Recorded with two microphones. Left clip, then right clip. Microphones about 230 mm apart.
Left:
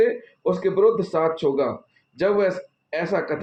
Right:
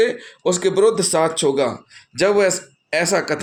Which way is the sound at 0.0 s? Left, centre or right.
Right.